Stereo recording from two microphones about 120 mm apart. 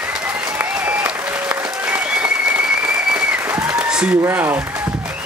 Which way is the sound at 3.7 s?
5° right (ahead or behind).